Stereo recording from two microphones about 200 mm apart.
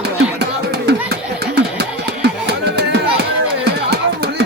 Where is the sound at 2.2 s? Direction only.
55° right (ahead or behind).